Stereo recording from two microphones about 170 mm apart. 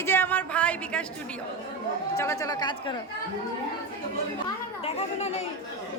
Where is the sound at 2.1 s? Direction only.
15° left (ahead or behind).